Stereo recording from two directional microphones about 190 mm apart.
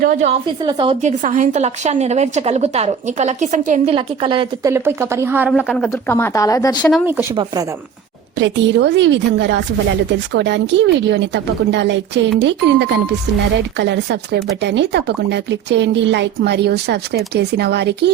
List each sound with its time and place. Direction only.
0.0 s a woman's voice: 45° right (ahead or behind)
0.3 s a woman's voice: 25° right (ahead or behind)
1.0 s a woman's voice: 40° right (ahead or behind)
3.9 s a woman's voice: 25° right (ahead or behind)
4.7 s speech: 15° right (ahead or behind); by 5.9 s centre (ahead or behind)
5.9 s speech: 10° left (ahead or behind)
7.0 s a woman's voice: 10° right (ahead or behind)
8.4 s a woman's voice: 70° right (ahead or behind)